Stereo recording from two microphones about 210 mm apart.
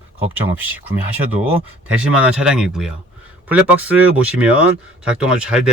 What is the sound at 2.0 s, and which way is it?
Speech, 5° right (ahead or behind).